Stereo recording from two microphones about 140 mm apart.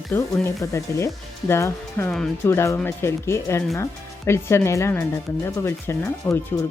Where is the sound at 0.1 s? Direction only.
20° left (ahead or behind).